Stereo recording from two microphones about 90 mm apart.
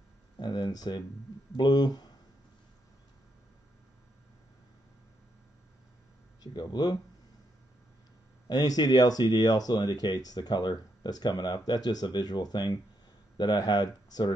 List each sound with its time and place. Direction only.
0.4 s speech: 55° left (ahead or behind)
6.4 s speech: 55° left (ahead or behind)
8.5 s speech: 50° left (ahead or behind)